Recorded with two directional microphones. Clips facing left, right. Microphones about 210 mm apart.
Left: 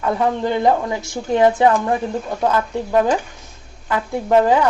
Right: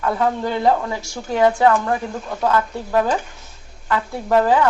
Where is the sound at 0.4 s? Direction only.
20° left (ahead or behind).